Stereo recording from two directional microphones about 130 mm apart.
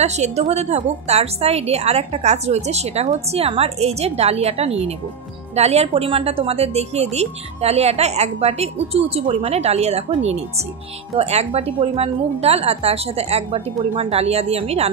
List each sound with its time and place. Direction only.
0.0 s a woman's voice: 60° right (ahead or behind)